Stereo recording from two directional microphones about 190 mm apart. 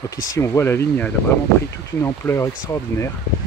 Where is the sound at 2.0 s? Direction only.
15° left (ahead or behind).